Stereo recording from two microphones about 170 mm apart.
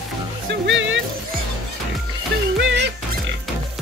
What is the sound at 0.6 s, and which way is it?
Music, 90° right.